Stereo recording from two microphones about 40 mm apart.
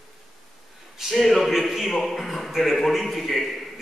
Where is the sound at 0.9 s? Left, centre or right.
Centre.